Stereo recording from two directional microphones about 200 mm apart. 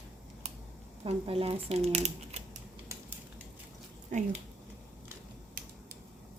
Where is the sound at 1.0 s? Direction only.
30° right (ahead or behind).